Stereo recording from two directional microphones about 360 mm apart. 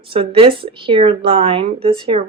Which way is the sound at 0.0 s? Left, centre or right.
Centre.